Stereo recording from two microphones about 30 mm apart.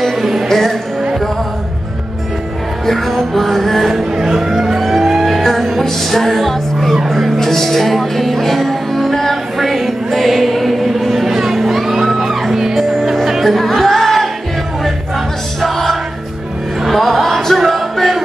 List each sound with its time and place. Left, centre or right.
0.0 s music: centre
0.5 s music: centre
2.9 s music: centre
4.2 s music: centre
7.3 s music: centre
13.4 s music: centre
15.6 s music: centre